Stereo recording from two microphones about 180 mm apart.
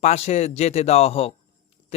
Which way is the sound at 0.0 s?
40° left (ahead or behind).